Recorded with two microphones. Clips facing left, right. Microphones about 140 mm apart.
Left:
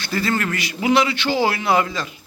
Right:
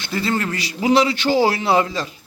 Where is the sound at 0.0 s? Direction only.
25° right (ahead or behind).